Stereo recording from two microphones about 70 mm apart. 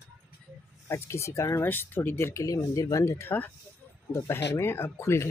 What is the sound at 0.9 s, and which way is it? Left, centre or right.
Speech, left.